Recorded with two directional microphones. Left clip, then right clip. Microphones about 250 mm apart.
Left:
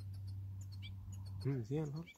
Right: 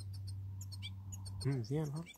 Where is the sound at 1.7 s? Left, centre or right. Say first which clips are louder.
Right 1 dB; centre.